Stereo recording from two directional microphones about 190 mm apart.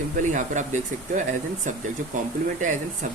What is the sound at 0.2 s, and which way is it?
Speech, 40° right (ahead or behind).